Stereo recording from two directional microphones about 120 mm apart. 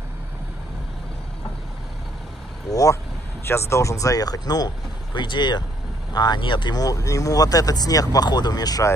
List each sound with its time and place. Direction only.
2.7 s speech: 30° left (ahead or behind)